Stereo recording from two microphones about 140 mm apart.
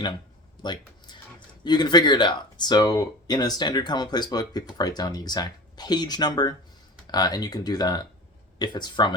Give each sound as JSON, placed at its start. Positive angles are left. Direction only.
{"t": 0.6, "sound": "speech", "side_deg": 30}